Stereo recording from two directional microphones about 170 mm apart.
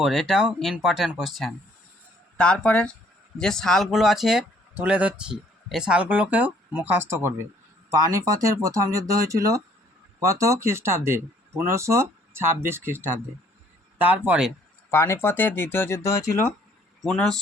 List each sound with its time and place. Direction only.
0.0 s speech: centre (ahead or behind)
14.8 s speech: 15° left (ahead or behind)
17.0 s speech: 5° left (ahead or behind)